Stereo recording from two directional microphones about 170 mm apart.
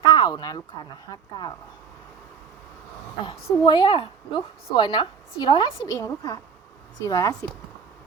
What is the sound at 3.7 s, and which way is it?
A woman's voice, 25° left (ahead or behind).